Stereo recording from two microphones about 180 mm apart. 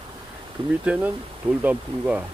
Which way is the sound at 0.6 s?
30° right (ahead or behind).